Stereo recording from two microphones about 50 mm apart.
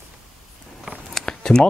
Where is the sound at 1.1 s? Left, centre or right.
Centre.